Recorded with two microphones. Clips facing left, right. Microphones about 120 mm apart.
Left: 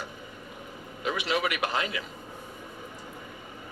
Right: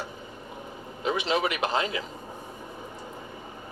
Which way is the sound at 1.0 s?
25° right (ahead or behind).